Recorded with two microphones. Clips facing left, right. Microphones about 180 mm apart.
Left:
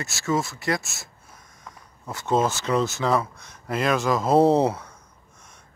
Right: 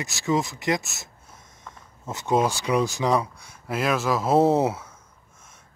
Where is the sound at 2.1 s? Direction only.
20° right (ahead or behind).